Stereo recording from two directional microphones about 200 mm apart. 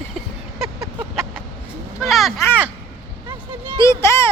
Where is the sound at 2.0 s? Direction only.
Centre (ahead or behind).